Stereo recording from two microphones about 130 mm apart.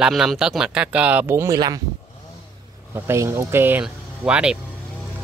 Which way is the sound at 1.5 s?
30° right (ahead or behind).